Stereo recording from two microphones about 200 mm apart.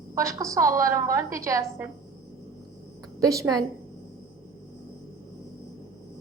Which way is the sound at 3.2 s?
15° right (ahead or behind).